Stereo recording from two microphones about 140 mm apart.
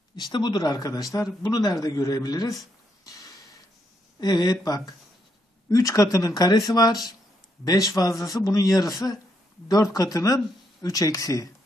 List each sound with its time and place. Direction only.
0.1 s a man's voice: 30° left (ahead or behind)
3.1 s a sound: 25° left (ahead or behind)
4.2 s a man's voice: 30° left (ahead or behind)